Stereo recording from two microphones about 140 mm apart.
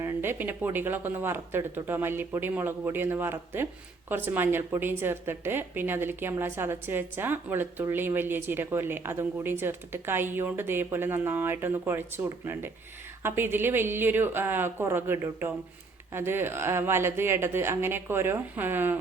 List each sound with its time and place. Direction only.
0.0 s a woman's voice: 15° right (ahead or behind)